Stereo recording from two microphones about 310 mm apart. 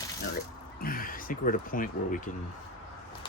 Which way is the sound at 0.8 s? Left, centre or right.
Left.